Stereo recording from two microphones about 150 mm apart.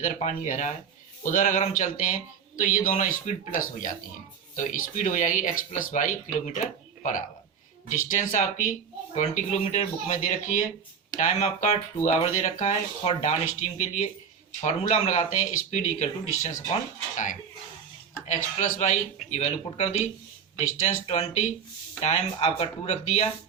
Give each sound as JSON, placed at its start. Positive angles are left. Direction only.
{"t": 0.0, "sound": "speech", "side_deg": 50}
{"t": 18.3, "sound": "speech", "side_deg": 50}